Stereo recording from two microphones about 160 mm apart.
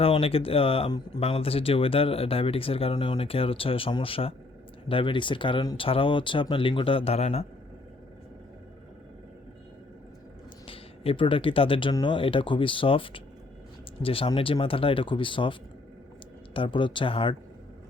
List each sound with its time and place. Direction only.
0.0 s speech: 35° left (ahead or behind)
10.7 s speech: 35° left (ahead or behind)
16.6 s speech: 30° left (ahead or behind)